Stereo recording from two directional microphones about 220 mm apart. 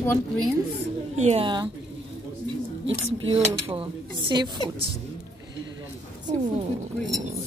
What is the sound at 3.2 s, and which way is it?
A woman's voice, 25° right (ahead or behind).